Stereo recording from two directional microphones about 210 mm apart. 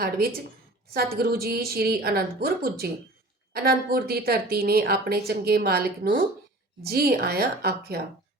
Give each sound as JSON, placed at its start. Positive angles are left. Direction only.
{"t": 0.9, "sound": "speech", "side_deg": -45}